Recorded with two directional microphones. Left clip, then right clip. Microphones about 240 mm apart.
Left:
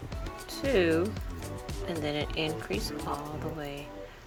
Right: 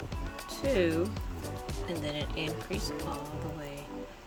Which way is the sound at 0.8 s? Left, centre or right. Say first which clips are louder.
Left 6 dB; centre.